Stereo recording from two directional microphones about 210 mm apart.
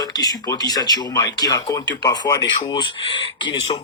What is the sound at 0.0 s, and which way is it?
Speech, 20° left (ahead or behind).